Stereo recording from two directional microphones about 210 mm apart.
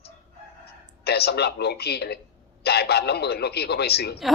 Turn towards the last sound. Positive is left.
turn(degrees=50)  # may be behind; listen again after turning